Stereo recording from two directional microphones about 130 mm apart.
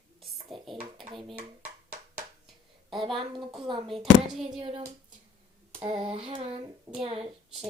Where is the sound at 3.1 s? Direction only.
35° right (ahead or behind).